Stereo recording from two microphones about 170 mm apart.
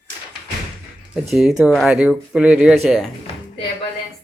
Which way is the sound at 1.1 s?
5° right (ahead or behind).